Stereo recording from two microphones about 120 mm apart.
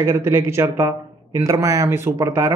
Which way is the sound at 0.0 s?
25° right (ahead or behind).